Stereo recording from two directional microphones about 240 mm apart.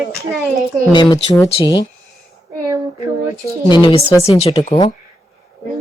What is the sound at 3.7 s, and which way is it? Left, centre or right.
Speech, centre.